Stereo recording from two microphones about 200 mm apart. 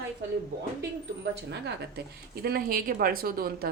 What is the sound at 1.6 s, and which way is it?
Speech, 55° right (ahead or behind).